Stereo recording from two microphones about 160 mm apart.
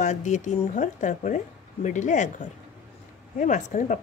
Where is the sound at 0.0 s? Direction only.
50° left (ahead or behind).